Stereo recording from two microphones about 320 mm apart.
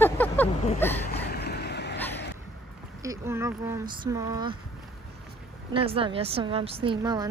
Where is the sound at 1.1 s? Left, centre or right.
Left.